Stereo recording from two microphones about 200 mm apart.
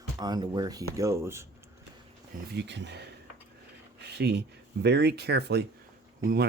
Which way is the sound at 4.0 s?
55° right (ahead or behind).